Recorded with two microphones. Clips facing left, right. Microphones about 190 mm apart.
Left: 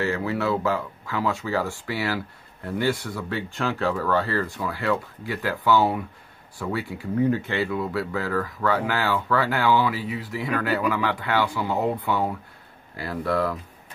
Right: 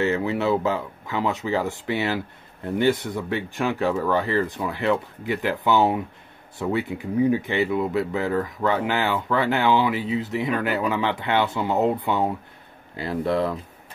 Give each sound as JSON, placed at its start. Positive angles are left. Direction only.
{"t": 0.0, "sound": "speech", "side_deg": -20}